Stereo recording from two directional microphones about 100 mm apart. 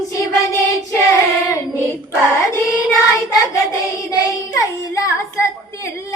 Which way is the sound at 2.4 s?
35° left (ahead or behind).